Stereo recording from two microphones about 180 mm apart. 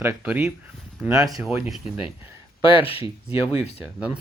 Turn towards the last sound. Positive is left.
turn(degrees=-5)  # may be behind; listen again after turning